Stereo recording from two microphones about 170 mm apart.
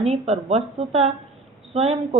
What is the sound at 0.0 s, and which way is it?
Speech, 35° right (ahead or behind).